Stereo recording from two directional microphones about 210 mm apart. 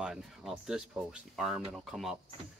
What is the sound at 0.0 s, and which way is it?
Speech, centre (ahead or behind).